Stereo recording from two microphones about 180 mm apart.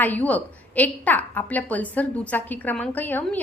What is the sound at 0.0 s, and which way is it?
A woman's voice, 10° left (ahead or behind).